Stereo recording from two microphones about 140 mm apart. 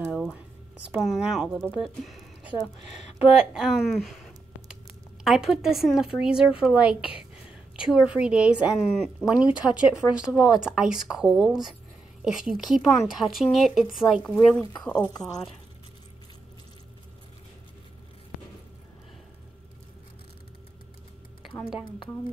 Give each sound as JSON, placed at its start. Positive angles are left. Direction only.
{"t": 0.1, "sound": "a sound", "side_deg": 0}
{"t": 0.9, "sound": "a woman's voice", "side_deg": 0}
{"t": 1.8, "sound": "a sound", "side_deg": 0}
{"t": 3.3, "sound": "a woman's voice", "side_deg": -5}
{"t": 5.2, "sound": "a woman's voice", "side_deg": 0}
{"t": 15.0, "sound": "a woman's voice", "side_deg": 30}